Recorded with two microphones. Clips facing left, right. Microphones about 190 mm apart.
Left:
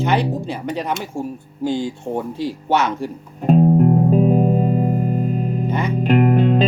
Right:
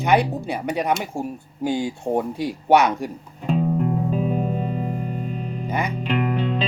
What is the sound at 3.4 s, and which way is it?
Music, 50° left (ahead or behind).